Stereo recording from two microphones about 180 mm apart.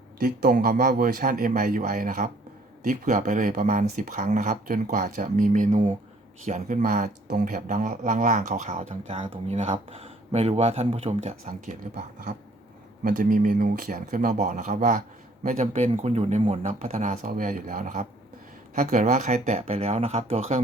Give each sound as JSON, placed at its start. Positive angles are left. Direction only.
{"t": 0.2, "sound": "speech", "side_deg": -50}